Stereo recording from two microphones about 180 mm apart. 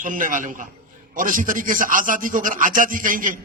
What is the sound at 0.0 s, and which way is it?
Music, 50° right (ahead or behind).